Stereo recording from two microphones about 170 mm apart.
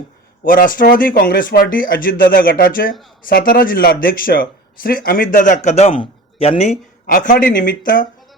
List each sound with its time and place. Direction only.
0.4 s speech: 55° left (ahead or behind)
1.1 s speech: 65° left (ahead or behind); by 6.7 s 35° left (ahead or behind)
7.1 s speech: 50° left (ahead or behind)